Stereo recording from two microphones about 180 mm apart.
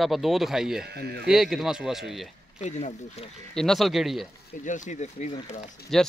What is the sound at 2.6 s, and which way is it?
Speech, 40° left (ahead or behind).